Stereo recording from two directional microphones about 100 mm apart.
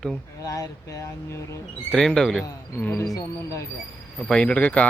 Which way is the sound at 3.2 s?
30° left (ahead or behind).